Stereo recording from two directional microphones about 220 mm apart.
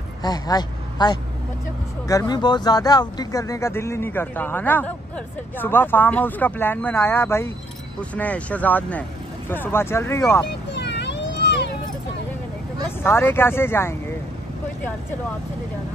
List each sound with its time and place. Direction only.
0.2 s speech: 20° left (ahead or behind)
10.7 s vehicle: 50° left (ahead or behind)
13.0 s speech: 10° left (ahead or behind)